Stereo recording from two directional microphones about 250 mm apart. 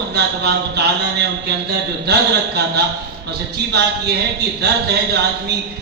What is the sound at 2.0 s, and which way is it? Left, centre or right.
A man's voice, right.